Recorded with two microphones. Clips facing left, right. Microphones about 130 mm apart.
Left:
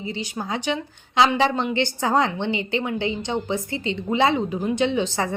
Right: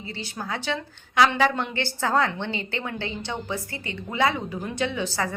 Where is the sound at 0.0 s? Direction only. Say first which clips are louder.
Left 5 dB; 15° left (ahead or behind).